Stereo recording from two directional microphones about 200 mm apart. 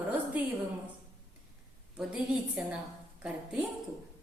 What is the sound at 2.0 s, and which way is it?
Speech, 5° right (ahead or behind).